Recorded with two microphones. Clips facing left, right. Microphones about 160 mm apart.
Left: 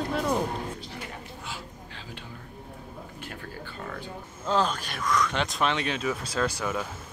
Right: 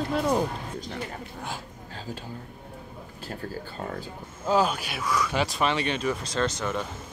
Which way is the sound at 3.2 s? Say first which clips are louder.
Right 7 dB; 35° right (ahead or behind).